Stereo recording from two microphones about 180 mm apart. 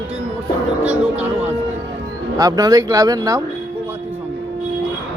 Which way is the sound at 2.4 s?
20° right (ahead or behind).